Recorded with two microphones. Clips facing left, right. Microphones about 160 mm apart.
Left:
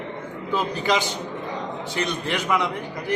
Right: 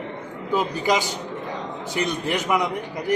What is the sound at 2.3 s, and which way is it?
Speech, 15° right (ahead or behind).